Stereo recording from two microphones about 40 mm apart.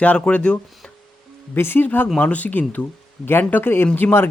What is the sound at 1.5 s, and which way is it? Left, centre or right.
Speech, left.